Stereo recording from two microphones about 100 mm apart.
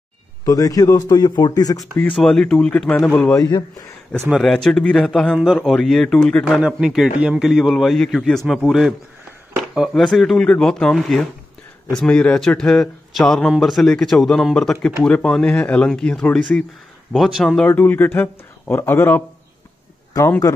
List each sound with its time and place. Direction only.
0.5 s a man's voice: 35° left (ahead or behind)
2.2 s speech: 10° left (ahead or behind)
4.4 s speech: 5° left (ahead or behind)
6.4 s speech: 5° right (ahead or behind); by 16.3 s 10° left (ahead or behind)
17.1 s speech: centre (ahead or behind)
17.6 s speech: 20° left (ahead or behind)
20.1 s a man's voice: 35° left (ahead or behind)